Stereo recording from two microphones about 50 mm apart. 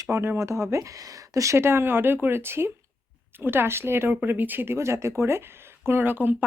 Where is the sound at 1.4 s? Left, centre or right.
Right.